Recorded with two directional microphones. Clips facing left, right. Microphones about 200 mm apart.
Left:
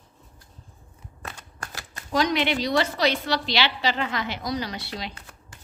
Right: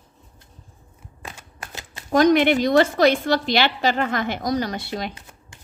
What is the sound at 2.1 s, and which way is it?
A woman's voice, 50° right (ahead or behind).